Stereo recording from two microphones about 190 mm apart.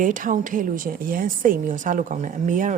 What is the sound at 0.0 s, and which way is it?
A woman's voice, 45° right (ahead or behind).